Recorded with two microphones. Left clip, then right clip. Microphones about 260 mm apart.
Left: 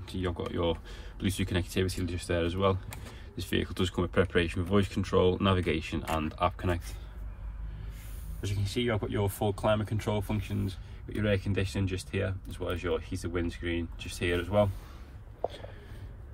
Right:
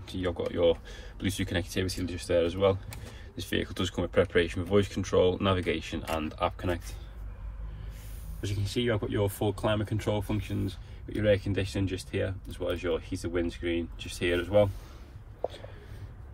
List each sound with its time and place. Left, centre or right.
0.0 s speech: centre
8.4 s speech: left